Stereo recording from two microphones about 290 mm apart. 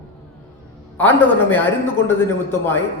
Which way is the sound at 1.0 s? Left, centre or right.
Centre.